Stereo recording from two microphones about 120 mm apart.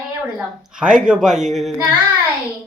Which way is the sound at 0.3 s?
5° right (ahead or behind).